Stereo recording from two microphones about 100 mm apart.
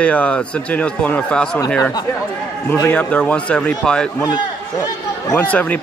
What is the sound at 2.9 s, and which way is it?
Speech, 10° left (ahead or behind).